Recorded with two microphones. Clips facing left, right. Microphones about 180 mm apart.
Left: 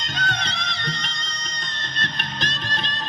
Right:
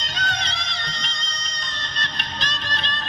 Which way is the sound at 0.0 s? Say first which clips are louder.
Left 1 dB; 50° left (ahead or behind).